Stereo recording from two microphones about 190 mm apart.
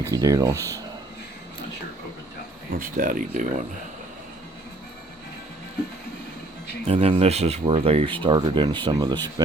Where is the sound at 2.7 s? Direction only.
45° right (ahead or behind).